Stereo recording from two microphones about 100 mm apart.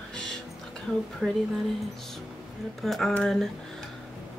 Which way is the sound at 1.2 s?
15° right (ahead or behind).